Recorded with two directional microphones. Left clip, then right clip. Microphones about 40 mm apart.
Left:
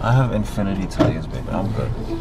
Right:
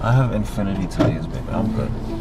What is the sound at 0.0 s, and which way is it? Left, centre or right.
Speech, centre.